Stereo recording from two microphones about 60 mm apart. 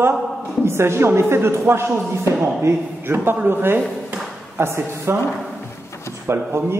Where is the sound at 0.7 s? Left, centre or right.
Right.